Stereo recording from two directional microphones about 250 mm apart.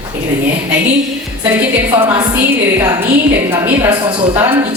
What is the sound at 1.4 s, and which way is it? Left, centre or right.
A woman's voice, centre.